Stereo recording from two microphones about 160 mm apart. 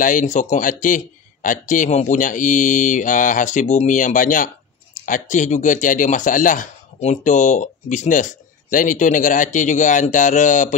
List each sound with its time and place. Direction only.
0.0 s speech: 55° left (ahead or behind)